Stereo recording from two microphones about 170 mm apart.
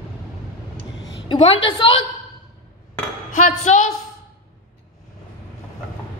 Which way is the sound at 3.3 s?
45° left (ahead or behind).